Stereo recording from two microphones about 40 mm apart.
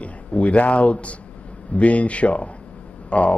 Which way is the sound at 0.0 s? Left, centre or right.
Left.